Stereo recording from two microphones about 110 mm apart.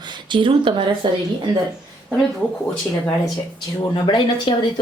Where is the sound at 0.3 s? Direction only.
50° right (ahead or behind).